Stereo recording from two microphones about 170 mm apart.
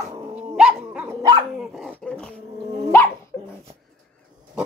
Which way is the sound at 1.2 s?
25° right (ahead or behind).